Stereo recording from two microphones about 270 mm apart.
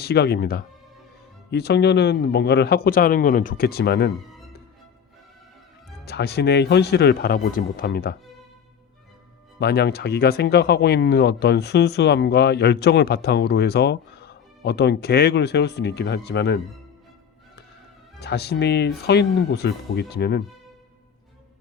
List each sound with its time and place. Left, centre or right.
0.0 s speech: left
6.1 s speech: left
9.6 s speech: left
18.2 s speech: left